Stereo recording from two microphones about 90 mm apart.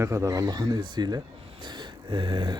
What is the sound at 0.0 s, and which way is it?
A man's voice, 35° right (ahead or behind).